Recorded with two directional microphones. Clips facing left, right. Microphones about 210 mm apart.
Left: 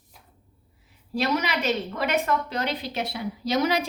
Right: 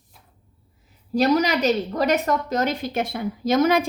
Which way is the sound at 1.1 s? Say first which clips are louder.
Right 7 dB; 40° right (ahead or behind).